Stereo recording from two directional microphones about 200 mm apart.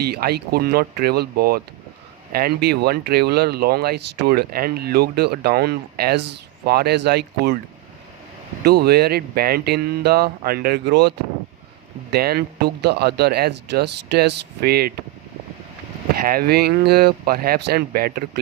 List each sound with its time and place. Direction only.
0.0 s speech: 50° right (ahead or behind)
8.6 s speech: 55° right (ahead or behind)
12.1 s speech: 50° right (ahead or behind)
16.1 s speech: 50° right (ahead or behind)